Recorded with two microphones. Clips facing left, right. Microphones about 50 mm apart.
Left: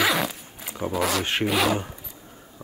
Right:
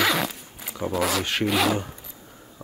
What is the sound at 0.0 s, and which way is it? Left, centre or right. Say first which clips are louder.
Zipper: even; centre.